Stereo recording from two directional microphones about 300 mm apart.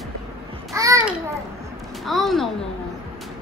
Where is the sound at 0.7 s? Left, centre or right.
Centre.